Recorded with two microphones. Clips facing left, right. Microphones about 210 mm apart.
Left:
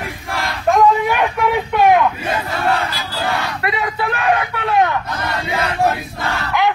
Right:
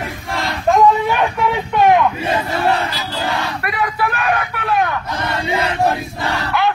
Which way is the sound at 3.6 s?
25° left (ahead or behind).